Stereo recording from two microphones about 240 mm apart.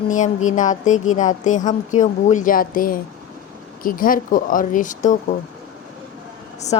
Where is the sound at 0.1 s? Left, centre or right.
Left.